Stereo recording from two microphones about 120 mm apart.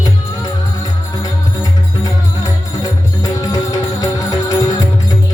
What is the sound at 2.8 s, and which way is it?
Music, 35° left (ahead or behind).